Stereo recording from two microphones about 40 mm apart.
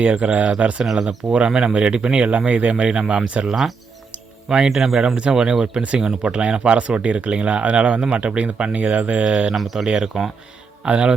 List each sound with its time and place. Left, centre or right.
0.0 s speech: right
3.5 s speech: centre
4.4 s speech: right
4.7 s speech: centre
4.9 s speech: right
9.2 s speech: right
9.6 s speech: centre
9.8 s speech: centre